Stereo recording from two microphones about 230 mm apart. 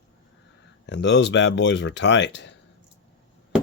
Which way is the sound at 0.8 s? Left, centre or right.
Left.